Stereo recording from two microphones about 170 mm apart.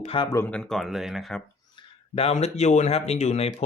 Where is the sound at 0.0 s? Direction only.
35° left (ahead or behind).